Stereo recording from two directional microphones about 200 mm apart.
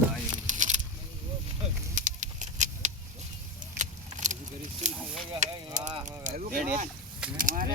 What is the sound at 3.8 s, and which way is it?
Vehicle, 40° right (ahead or behind).